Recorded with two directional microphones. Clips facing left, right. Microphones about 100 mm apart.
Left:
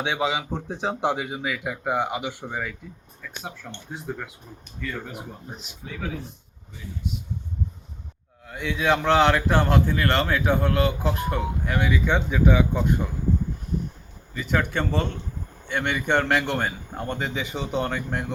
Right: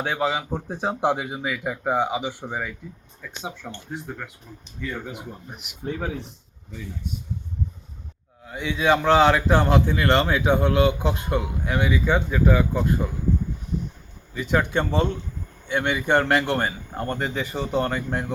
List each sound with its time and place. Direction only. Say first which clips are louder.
0.0 s a man's voice: right 1 dB; centre (ahead or behind)
5.8 s speech: right 7 dB; 45° right (ahead or behind)
8.4 s a man's voice: right 2 dB; 10° right (ahead or behind)
14.6 s a man's voice: right 3 dB; 15° right (ahead or behind)